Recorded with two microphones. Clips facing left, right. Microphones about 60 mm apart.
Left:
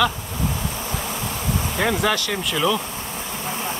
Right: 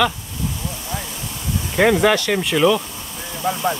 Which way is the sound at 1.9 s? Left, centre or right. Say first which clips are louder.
Right 6 dB; centre.